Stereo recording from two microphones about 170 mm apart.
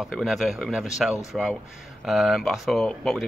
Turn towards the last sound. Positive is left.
turn(degrees=0)  # may be behind; listen again after turning